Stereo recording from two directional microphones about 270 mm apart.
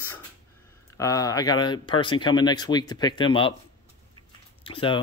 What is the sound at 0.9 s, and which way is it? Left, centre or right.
Speech, centre.